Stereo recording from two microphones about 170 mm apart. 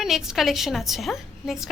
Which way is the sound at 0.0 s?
Centre (ahead or behind).